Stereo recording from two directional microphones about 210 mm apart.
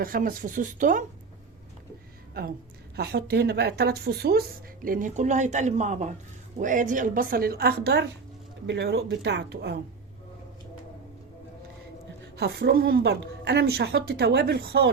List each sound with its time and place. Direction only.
0.0 s speech: 45° right (ahead or behind)
2.4 s a woman's voice: 45° right (ahead or behind)
12.4 s a woman's voice: 50° right (ahead or behind)